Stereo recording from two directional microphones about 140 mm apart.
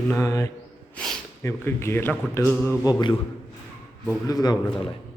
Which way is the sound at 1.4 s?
20° left (ahead or behind).